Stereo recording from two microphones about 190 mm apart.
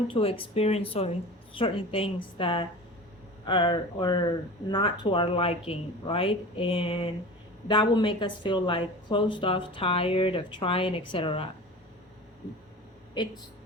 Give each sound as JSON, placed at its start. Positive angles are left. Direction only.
{"t": 0.1, "sound": "a woman's voice", "side_deg": 30}